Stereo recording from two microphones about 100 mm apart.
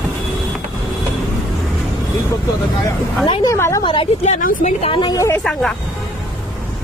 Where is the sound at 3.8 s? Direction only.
60° left (ahead or behind).